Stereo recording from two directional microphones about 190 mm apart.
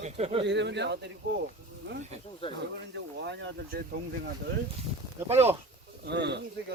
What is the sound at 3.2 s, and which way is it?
Speech, 65° right (ahead or behind).